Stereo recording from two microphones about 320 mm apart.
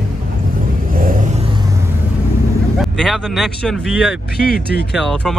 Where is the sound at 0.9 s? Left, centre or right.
Right.